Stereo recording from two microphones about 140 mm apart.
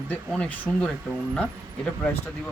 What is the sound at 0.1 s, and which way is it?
Speech, 10° left (ahead or behind).